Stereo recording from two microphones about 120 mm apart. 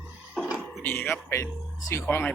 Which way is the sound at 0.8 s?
15° left (ahead or behind).